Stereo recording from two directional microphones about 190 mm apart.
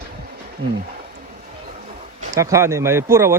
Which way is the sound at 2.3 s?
15° right (ahead or behind).